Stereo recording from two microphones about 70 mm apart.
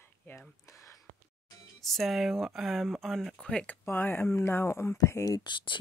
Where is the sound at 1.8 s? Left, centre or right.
Centre.